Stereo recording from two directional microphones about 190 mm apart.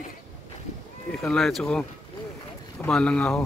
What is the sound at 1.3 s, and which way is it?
Speech, centre (ahead or behind).